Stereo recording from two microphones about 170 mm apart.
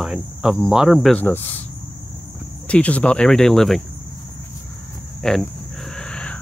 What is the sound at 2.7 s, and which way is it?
Speech, 5° left (ahead or behind).